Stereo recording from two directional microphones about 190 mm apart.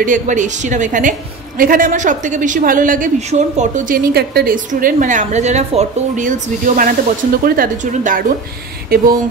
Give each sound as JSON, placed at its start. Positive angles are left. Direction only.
{"t": 0.0, "sound": "a woman's voice", "side_deg": -40}